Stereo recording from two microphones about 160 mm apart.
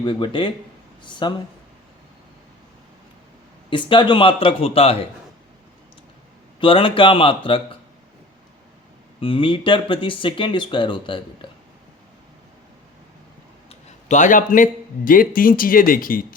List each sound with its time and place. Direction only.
0.0 s speech: 30° left (ahead or behind)
3.7 s speech: 30° left (ahead or behind)
6.6 s speech: 30° left (ahead or behind)
9.2 s speech: 30° left (ahead or behind)
13.7 s speech: 50° left (ahead or behind)